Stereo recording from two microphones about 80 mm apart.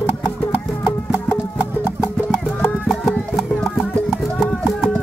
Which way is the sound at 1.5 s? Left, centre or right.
Centre.